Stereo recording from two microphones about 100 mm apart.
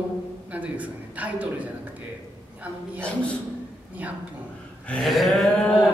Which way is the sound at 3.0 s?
10° left (ahead or behind).